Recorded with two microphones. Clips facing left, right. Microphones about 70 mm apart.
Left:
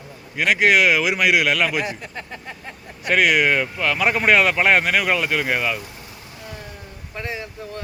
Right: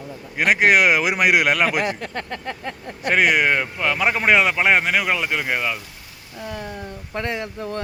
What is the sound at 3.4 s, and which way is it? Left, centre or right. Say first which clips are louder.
Speech: even; centre.